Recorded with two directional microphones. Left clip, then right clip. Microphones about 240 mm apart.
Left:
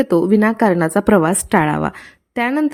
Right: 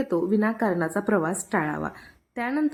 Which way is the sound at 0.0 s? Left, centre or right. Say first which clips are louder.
Left 10 dB; left.